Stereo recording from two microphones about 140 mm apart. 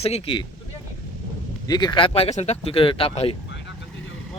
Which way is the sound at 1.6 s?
30° left (ahead or behind).